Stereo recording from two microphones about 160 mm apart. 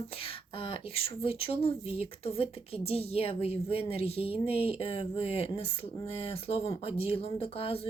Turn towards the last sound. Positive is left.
turn(degrees=35)  # may be behind; listen again after turning